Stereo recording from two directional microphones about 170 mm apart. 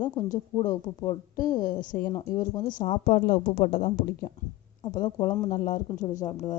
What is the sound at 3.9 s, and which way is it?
Speech, 55° left (ahead or behind).